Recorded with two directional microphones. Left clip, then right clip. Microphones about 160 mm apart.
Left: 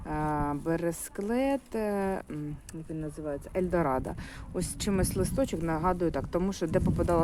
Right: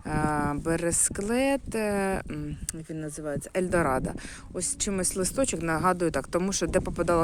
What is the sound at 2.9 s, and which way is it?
Speech, 55° right (ahead or behind).